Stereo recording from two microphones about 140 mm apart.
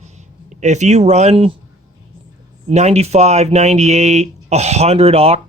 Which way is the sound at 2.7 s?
50° right (ahead or behind).